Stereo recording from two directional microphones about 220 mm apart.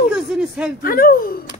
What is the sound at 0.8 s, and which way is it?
Speech, 40° left (ahead or behind).